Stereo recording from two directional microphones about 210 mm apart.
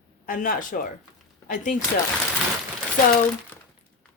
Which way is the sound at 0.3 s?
40° left (ahead or behind).